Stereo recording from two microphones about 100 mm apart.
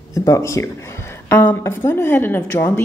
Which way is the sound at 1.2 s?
20° left (ahead or behind).